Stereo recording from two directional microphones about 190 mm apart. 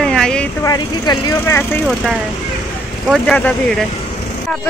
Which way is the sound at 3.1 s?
5° left (ahead or behind).